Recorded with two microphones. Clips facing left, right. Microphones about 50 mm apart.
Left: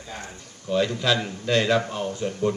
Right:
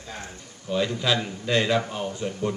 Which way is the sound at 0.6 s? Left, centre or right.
Centre.